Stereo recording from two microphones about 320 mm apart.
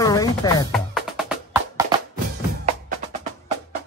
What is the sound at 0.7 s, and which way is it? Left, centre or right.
Music, centre.